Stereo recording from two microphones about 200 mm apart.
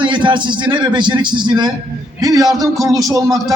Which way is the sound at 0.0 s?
25° right (ahead or behind).